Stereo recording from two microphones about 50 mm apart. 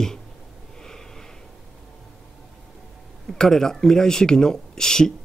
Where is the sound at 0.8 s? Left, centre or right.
Centre.